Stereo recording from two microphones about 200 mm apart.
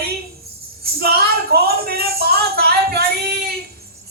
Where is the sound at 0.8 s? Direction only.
50° right (ahead or behind).